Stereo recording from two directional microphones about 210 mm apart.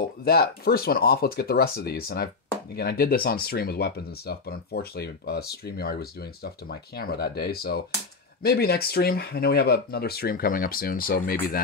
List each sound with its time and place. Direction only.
0.2 s speech: 50° left (ahead or behind)